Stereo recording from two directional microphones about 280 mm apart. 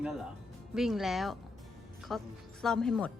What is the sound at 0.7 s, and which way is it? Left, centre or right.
Speech, centre.